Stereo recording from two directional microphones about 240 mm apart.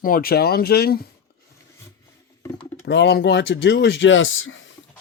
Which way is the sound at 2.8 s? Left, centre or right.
Left.